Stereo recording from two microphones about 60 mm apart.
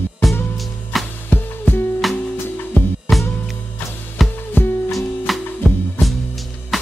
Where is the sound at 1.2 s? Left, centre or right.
Left.